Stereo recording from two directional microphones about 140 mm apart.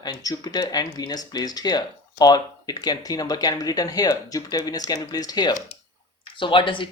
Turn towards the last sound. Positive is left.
turn(degrees=35)  # may be behind; listen again after turning